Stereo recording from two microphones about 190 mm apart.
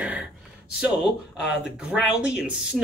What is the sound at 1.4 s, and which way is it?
Speech, 65° left (ahead or behind).